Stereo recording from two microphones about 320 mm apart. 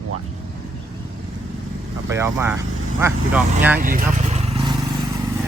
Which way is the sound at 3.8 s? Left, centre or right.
Right.